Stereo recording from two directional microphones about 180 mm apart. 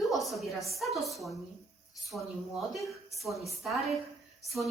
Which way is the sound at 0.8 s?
Centre (ahead or behind).